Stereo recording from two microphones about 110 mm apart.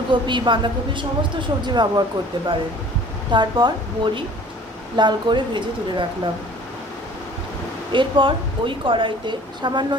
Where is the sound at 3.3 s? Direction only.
40° right (ahead or behind).